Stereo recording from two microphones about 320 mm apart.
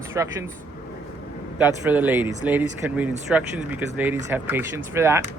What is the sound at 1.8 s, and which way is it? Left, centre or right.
Speech, centre.